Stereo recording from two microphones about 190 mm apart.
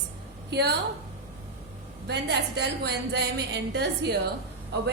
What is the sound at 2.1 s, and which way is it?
A woman's voice, 60° right (ahead or behind).